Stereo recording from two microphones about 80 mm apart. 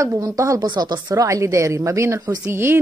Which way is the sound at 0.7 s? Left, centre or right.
Right.